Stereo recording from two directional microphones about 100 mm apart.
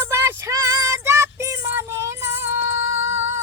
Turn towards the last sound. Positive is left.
turn(degrees=-25)  # may be behind; listen again after turning